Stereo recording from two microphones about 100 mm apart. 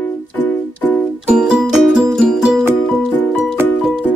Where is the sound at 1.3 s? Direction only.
5° right (ahead or behind).